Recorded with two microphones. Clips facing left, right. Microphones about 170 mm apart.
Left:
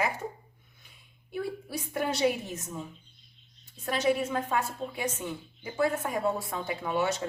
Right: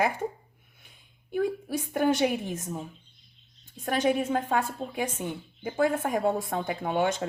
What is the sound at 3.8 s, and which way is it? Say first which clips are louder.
Speech: right 2 dB; 50° right (ahead or behind).